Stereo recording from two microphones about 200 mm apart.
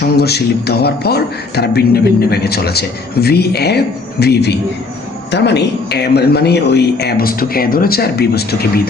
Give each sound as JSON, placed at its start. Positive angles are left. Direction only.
{"t": 0.0, "sound": "a man's voice", "side_deg": 55}